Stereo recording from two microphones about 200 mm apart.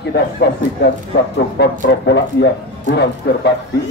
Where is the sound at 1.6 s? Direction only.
55° left (ahead or behind).